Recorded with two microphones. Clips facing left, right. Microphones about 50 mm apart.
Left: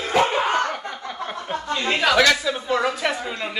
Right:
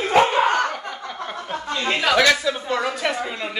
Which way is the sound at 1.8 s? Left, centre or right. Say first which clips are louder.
Even; centre.